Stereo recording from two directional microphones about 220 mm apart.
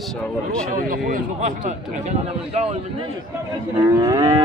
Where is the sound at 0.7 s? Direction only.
40° right (ahead or behind).